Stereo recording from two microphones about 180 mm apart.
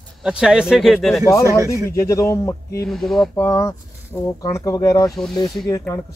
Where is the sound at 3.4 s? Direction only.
15° left (ahead or behind).